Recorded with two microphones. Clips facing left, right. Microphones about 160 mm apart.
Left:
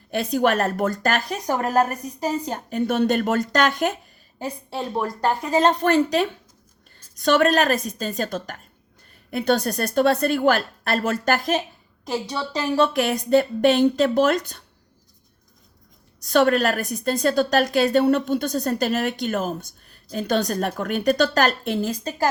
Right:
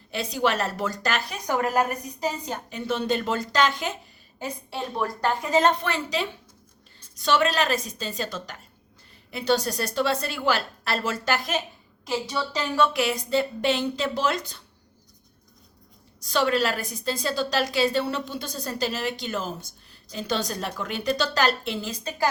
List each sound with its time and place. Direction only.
0.1 s a woman's voice: 55° left (ahead or behind)
4.4 s a woman's voice: 35° left (ahead or behind)
5.8 s a woman's voice: 50° left (ahead or behind)
12.7 s a woman's voice: 45° left (ahead or behind)
16.2 s a woman's voice: 55° left (ahead or behind)